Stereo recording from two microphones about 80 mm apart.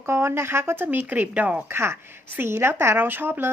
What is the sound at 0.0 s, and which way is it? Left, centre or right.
A woman's voice, right.